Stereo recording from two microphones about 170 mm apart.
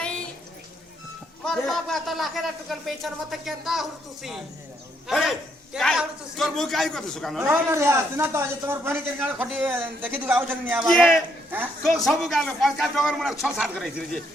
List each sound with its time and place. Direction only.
1.5 s a man's voice: centre (ahead or behind)
7.4 s a man's voice: 15° right (ahead or behind)